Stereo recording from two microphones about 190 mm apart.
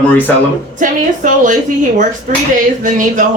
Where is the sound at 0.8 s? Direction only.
45° right (ahead or behind).